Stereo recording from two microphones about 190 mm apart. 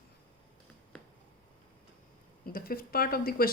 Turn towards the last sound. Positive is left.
turn(degrees=50)  # may be behind; listen again after turning